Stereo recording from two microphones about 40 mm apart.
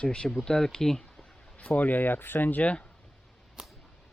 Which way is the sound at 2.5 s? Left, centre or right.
Left.